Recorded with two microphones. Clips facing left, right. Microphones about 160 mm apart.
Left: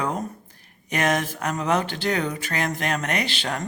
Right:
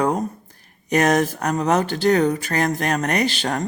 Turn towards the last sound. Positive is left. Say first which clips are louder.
# right 6 dB
turn(degrees=-40)  # may be behind; listen again after turning